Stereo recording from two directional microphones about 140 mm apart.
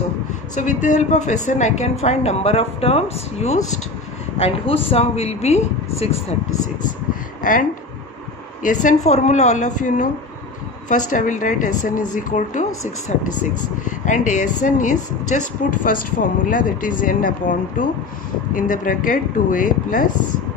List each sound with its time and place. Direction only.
0.8 s speech: 60° left (ahead or behind)
8.6 s a woman's voice: 60° left (ahead or behind)